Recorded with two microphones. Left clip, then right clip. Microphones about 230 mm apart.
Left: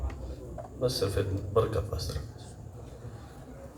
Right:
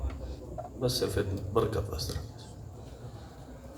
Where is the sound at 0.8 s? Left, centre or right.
Right.